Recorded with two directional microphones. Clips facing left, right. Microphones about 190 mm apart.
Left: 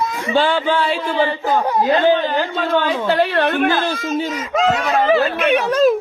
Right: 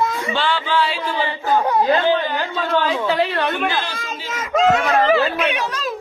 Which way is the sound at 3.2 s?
55° left (ahead or behind).